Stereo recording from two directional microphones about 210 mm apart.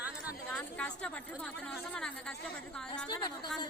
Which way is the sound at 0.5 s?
5° left (ahead or behind).